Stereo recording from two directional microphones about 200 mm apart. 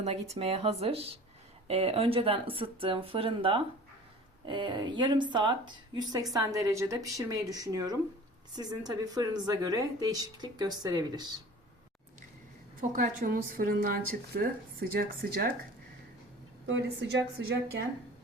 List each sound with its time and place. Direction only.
0.0 s a woman's voice: 30° right (ahead or behind)
12.8 s a woman's voice: 40° right (ahead or behind)
16.6 s a woman's voice: 70° right (ahead or behind)